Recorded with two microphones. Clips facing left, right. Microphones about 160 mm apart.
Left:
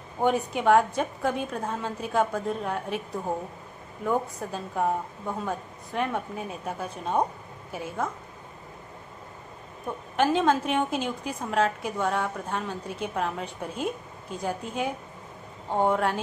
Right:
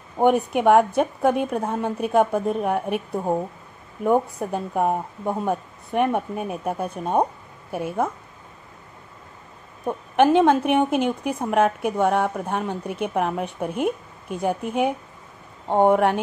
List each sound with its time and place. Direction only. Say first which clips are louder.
0.2 s a woman's voice: right 6 dB; 60° right (ahead or behind)
4.0 s a woman's voice: right 7 dB; 60° right (ahead or behind)
9.8 s a woman's voice: right 7 dB; 60° right (ahead or behind)